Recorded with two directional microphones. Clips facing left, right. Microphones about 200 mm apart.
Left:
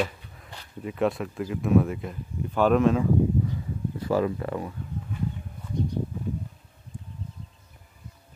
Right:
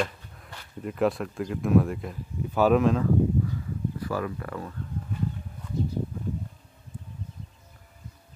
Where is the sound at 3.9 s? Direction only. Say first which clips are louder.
Left 8 dB; 25° left (ahead or behind).